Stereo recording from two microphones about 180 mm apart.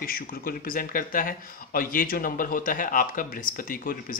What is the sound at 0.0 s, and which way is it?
Speech, 55° left (ahead or behind).